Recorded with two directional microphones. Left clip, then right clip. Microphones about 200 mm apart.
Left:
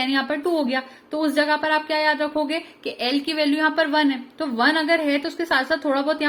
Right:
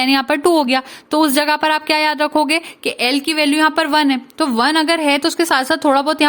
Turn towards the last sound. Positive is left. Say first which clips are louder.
# right 7 dB
turn(degrees=-50)  # may be behind; listen again after turning